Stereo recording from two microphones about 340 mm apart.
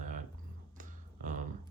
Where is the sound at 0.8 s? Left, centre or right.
Right.